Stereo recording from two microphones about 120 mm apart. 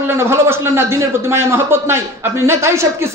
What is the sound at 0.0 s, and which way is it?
A man's voice, 20° right (ahead or behind).